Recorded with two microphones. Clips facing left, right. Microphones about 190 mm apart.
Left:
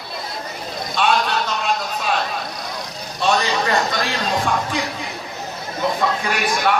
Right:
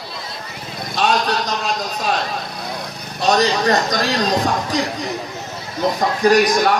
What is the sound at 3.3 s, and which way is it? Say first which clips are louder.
Speech: right 4 dB; 40° right (ahead or behind).